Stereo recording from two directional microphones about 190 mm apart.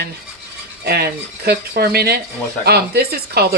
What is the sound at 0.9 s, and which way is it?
Speech, 55° right (ahead or behind).